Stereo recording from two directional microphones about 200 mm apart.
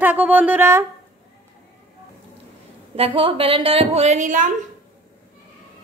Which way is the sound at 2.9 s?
25° right (ahead or behind).